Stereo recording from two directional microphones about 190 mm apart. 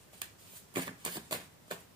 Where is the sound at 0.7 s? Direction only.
25° right (ahead or behind).